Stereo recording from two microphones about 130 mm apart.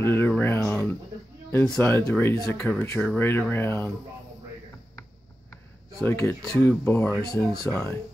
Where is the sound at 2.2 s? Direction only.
20° left (ahead or behind).